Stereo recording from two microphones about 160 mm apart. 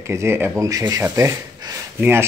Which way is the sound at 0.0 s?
15° right (ahead or behind).